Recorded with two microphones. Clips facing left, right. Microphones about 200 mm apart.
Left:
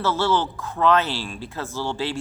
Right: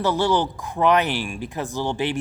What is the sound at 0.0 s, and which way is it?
Speech, 15° right (ahead or behind).